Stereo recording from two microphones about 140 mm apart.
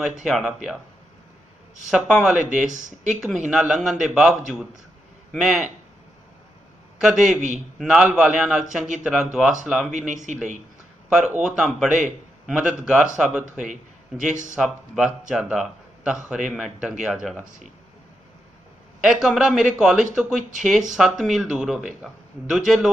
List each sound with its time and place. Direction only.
0.3 s speech: 5° right (ahead or behind)
1.9 s speech: 5° right (ahead or behind)
2.6 s speech: 65° right (ahead or behind)
3.1 s speech: 5° right (ahead or behind)
7.0 s speech: 5° right (ahead or behind)
9.9 s speech: 65° right (ahead or behind)
11.1 s speech: 5° right (ahead or behind)
13.7 s a man's voice: 65° right (ahead or behind)
14.5 s speech: 5° right (ahead or behind)
19.0 s speech: 5° right (ahead or behind)